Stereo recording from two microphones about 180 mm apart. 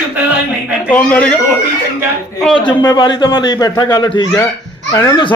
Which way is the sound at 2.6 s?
25° left (ahead or behind).